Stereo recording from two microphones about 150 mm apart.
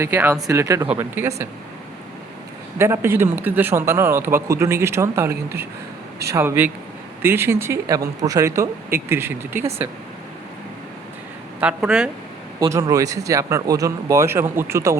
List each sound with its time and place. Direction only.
0.0 s a man's voice: 15° right (ahead or behind)
2.7 s a man's voice: 15° right (ahead or behind)
11.6 s speech: 5° right (ahead or behind)
12.5 s speech: 20° right (ahead or behind)